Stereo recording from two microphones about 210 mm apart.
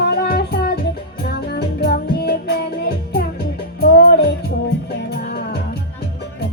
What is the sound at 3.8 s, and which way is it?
Music, 50° left (ahead or behind).